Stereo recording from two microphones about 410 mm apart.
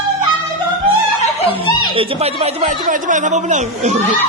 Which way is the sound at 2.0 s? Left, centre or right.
Centre.